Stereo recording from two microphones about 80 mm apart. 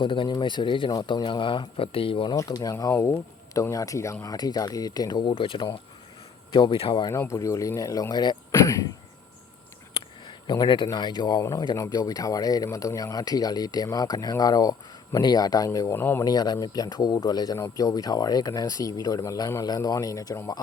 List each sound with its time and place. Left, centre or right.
0.0 s speech: left
2.3 s speech: left
5.2 s speech: left
7.1 s speech: left
8.1 s speech: left
8.6 s a sound: left
9.9 s a sound: left
10.5 s speech: left
11.3 s speech: left
15.9 s speech: left
16.2 s speech: left